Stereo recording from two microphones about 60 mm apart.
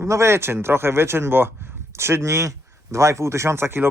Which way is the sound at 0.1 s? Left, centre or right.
Right.